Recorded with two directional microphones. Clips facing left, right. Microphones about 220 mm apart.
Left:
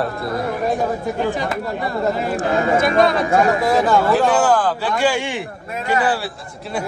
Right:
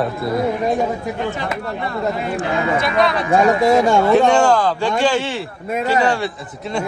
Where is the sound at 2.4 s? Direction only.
45° left (ahead or behind).